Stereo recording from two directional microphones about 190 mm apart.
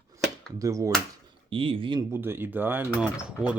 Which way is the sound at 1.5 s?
30° right (ahead or behind).